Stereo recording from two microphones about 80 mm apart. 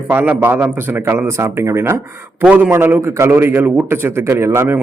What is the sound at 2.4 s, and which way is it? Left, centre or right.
A man's voice, centre.